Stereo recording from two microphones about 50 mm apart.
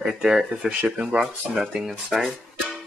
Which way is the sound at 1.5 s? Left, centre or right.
Centre.